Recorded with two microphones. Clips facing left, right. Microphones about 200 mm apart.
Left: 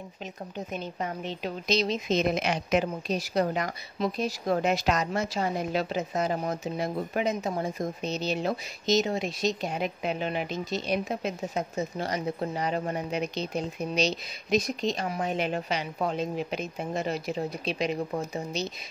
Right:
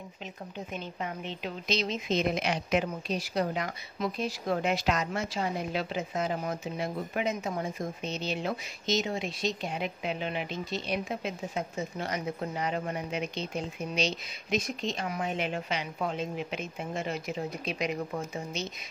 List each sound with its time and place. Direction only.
0.7 s speech: 40° left (ahead or behind)